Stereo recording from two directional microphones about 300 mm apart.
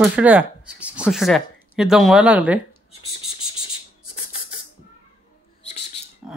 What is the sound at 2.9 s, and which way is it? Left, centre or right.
Bird, centre.